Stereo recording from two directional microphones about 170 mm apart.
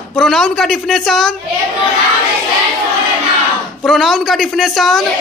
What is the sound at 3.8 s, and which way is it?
A man's voice, centre (ahead or behind).